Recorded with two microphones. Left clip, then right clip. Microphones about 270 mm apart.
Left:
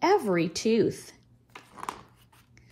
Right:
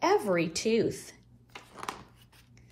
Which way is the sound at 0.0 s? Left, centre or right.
Left.